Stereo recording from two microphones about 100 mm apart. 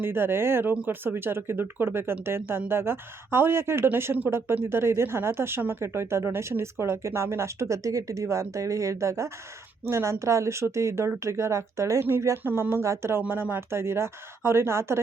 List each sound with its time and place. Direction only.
0.0 s speech: 20° right (ahead or behind)